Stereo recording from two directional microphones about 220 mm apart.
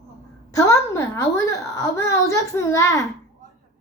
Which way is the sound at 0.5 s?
15° left (ahead or behind).